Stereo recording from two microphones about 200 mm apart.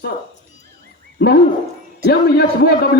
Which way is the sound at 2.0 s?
55° left (ahead or behind).